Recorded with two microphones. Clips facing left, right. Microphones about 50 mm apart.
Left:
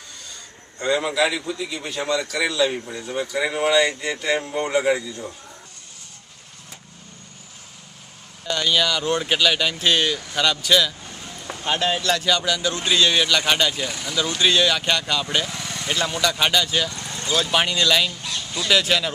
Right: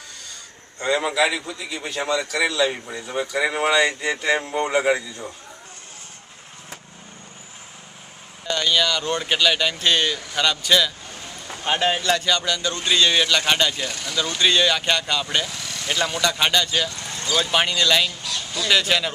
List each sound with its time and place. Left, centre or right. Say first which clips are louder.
0.7 s speech: even; centre
8.5 s speech: even; centre
11.6 s speech: right 1 dB; centre
15.5 s vehicle: left 2 dB; left
15.9 s speech: even; centre
18.2 s a sound: right 1 dB; left
18.7 s speech: even; centre